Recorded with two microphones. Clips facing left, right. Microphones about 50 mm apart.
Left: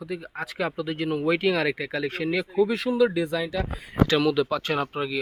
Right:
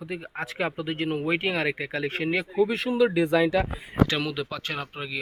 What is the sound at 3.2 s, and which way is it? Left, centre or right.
Speech, right.